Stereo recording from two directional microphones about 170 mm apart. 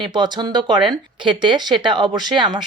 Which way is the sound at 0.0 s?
25° right (ahead or behind).